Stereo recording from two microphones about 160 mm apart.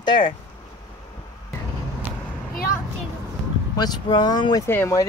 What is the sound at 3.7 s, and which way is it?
Speech, 25° left (ahead or behind).